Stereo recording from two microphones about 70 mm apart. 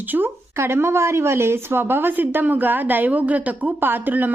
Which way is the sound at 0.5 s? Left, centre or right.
Right.